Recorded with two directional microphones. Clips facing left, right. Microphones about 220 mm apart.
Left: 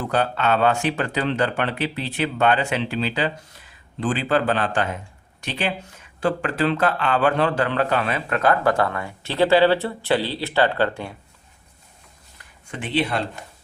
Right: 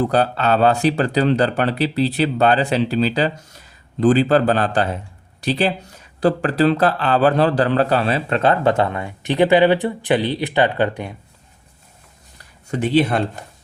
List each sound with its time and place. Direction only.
0.0 s speech: 35° right (ahead or behind); by 11.1 s 15° right (ahead or behind)
12.4 s speech: 40° right (ahead or behind)